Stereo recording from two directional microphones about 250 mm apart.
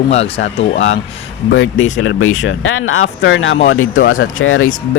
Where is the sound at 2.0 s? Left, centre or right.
Left.